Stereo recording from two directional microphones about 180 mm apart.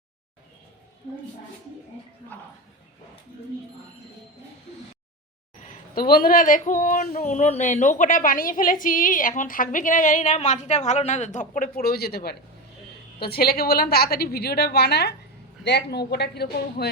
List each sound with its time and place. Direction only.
2.3 s speech: 10° left (ahead or behind)
5.6 s a woman's voice: 55° left (ahead or behind)
7.3 s a woman's voice: 40° left (ahead or behind); by 16.9 s 65° left (ahead or behind)